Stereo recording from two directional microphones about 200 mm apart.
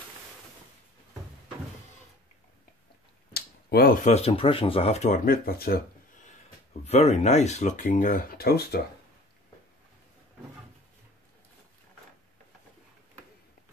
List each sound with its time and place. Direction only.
3.3 s a sound: 50° left (ahead or behind)
4.1 s speech: 30° left (ahead or behind); by 5.8 s 50° left (ahead or behind)
6.9 s speech: 35° left (ahead or behind); by 8.8 s 50° left (ahead or behind)